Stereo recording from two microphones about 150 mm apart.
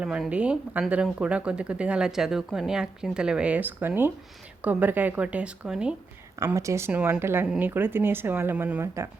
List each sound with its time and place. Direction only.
0.0 s speech: 5° right (ahead or behind)
6.4 s speech: 20° right (ahead or behind)